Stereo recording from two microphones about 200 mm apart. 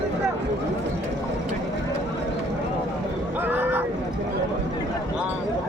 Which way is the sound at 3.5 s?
10° right (ahead or behind).